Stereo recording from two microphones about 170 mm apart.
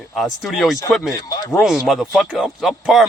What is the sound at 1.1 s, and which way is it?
Speech, 20° left (ahead or behind).